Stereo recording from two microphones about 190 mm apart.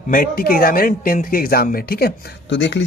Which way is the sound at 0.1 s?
50° left (ahead or behind).